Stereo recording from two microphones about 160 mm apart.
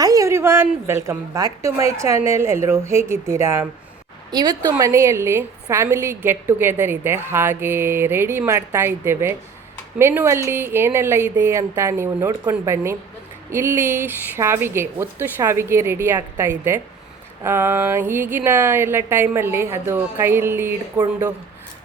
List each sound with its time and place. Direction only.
0.0 s a woman's voice: 20° right (ahead or behind)